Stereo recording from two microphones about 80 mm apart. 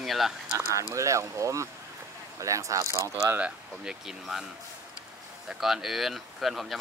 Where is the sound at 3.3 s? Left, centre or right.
Centre.